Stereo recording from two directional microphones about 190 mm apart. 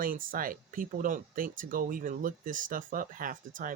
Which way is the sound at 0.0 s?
45° right (ahead or behind).